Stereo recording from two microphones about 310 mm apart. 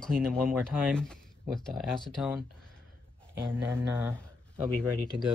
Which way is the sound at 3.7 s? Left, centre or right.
Centre.